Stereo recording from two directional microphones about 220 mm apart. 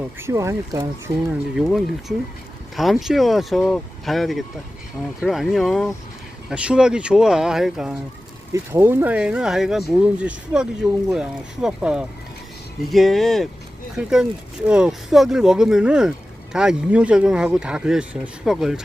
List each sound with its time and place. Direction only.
0.2 s speech: 10° right (ahead or behind)
1.5 s speech: centre (ahead or behind)